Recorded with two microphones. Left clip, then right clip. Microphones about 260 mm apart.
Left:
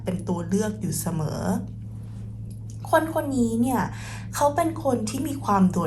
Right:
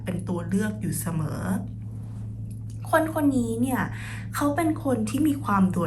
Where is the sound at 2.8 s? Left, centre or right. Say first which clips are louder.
Left 1 dB; centre.